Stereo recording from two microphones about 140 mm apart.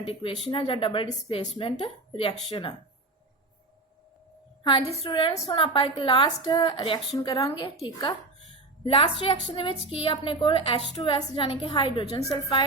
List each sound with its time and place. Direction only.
0.0 s a woman's voice: 40° left (ahead or behind)
4.6 s a woman's voice: 40° left (ahead or behind)